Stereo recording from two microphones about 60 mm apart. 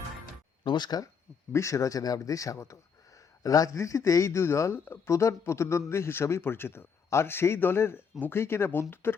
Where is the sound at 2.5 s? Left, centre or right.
Left.